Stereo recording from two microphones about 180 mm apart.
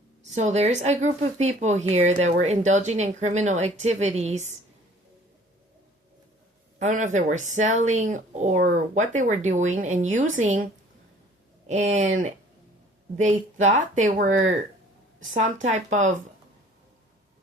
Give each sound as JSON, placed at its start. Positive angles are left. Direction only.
{"t": 0.2, "sound": "speech", "side_deg": -40}
{"t": 6.7, "sound": "speech", "side_deg": -40}
{"t": 13.1, "sound": "speech", "side_deg": -40}
{"t": 15.3, "sound": "speech", "side_deg": -45}